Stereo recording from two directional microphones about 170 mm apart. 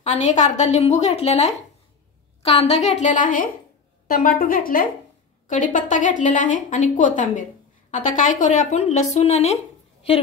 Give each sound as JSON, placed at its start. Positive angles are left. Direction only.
{"t": 0.0, "sound": "speech", "side_deg": 45}